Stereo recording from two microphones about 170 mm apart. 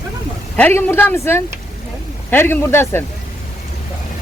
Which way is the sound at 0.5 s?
10° left (ahead or behind).